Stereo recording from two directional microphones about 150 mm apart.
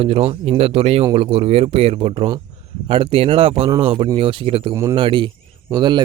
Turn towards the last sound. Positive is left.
turn(degrees=-30)  # may be behind; listen again after turning